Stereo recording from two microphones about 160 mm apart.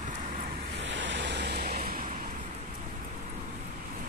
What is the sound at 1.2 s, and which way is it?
Vehicle, 90° right.